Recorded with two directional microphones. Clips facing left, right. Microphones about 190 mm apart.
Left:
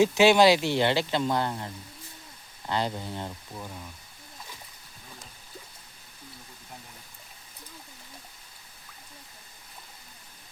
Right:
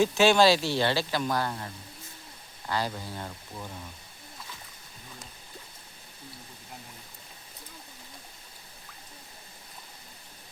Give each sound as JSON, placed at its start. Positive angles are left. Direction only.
{"t": 0.0, "sound": "speech", "side_deg": 20}